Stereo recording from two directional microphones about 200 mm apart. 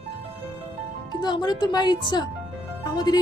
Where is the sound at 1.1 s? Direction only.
20° left (ahead or behind).